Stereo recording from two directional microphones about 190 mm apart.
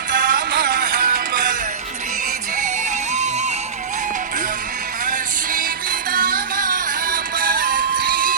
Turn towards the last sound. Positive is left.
turn(degrees=-45)  # may be behind; listen again after turning